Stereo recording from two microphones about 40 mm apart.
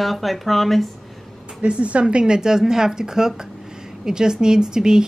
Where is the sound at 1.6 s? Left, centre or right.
Right.